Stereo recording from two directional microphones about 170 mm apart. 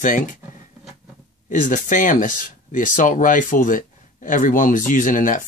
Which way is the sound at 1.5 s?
50° left (ahead or behind).